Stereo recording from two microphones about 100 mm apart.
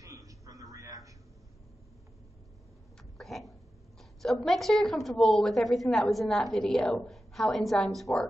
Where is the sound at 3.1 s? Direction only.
Centre (ahead or behind).